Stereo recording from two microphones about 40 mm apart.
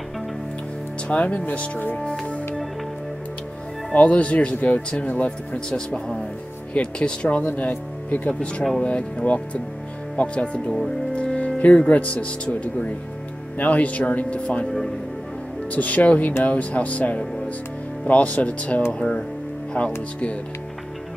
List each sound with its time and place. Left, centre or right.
1.0 s speech: left
3.9 s speech: left
5.7 s speech: left
7.4 s speech: left
8.3 s speech: left
11.3 s music: left
11.9 s speech: left
13.6 s speech: left
15.7 s speech: left